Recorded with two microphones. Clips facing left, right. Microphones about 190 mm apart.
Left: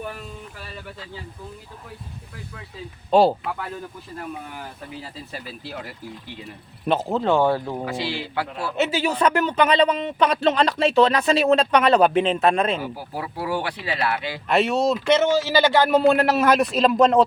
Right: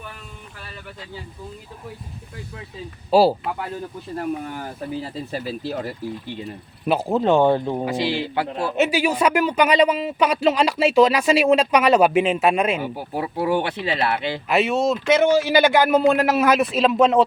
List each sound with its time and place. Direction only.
3.1 s a man's voice: 5° right (ahead or behind)
5.3 s speech: 40° right (ahead or behind)
6.8 s speech: 10° right (ahead or behind)
12.8 s speech: 25° right (ahead or behind)
14.4 s a man's voice: centre (ahead or behind)
15.2 s a man's voice: 15° right (ahead or behind)